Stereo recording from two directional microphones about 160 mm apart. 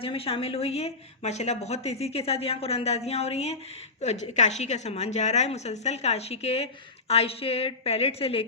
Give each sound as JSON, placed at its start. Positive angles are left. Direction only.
{"t": 0.0, "sound": "a woman's voice", "side_deg": 35}